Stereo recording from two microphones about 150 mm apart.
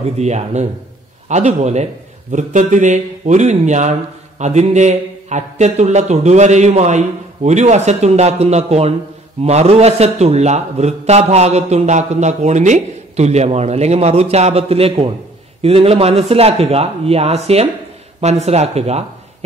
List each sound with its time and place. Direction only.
0.2 s a man's voice: 50° right (ahead or behind)